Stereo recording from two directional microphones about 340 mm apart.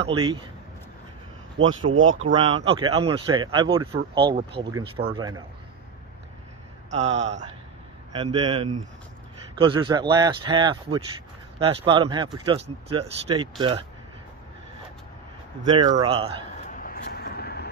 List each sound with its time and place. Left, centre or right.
0.0 s a man's voice: centre
1.8 s speech: right
2.3 s a man's voice: centre
6.9 s a man's voice: centre
15.6 s a man's voice: centre
16.6 s vehicle: left